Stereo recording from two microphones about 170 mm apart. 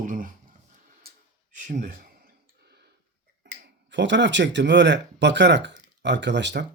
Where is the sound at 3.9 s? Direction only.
90° right.